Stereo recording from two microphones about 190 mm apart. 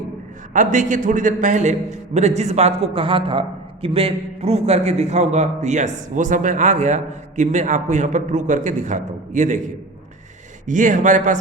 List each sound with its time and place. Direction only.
0.5 s a man's voice: 40° right (ahead or behind)
10.7 s a man's voice: 40° right (ahead or behind)